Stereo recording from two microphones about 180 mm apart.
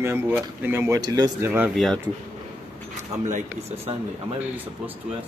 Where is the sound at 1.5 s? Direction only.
10° right (ahead or behind).